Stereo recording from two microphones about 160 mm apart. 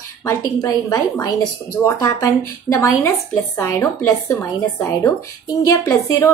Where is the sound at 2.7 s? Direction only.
20° left (ahead or behind).